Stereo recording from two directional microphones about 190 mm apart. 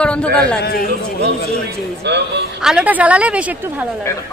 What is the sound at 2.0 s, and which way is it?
Speech, 65° right (ahead or behind).